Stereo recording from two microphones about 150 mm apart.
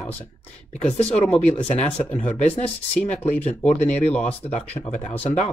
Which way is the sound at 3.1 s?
50° left (ahead or behind).